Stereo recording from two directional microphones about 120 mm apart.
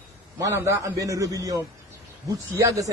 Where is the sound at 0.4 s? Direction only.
25° right (ahead or behind).